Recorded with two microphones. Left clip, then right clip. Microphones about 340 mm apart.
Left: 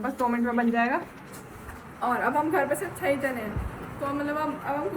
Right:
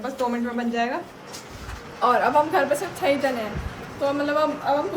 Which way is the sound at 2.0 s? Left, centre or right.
Centre.